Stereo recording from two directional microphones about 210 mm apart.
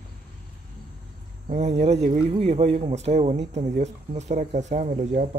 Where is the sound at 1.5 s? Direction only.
30° right (ahead or behind).